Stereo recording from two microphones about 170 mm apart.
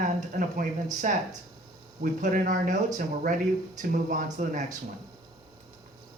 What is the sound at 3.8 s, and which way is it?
Speech, 50° right (ahead or behind).